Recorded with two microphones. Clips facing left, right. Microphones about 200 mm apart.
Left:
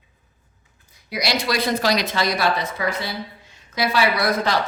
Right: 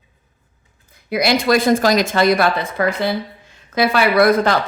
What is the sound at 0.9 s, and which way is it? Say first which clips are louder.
Speech: right 8 dB; 55° right (ahead or behind).